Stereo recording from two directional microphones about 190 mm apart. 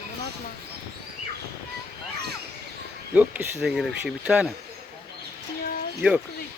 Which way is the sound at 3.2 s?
5° right (ahead or behind).